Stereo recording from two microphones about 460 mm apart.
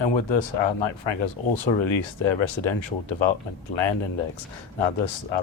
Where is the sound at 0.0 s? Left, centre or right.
Left.